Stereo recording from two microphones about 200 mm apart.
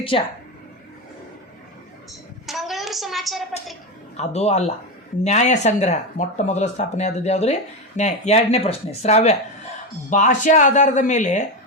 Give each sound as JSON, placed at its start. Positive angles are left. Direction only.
{"t": 0.1, "sound": "a woman's voice", "side_deg": 30}
{"t": 2.5, "sound": "a sound", "side_deg": 0}
{"t": 4.2, "sound": "speech", "side_deg": 35}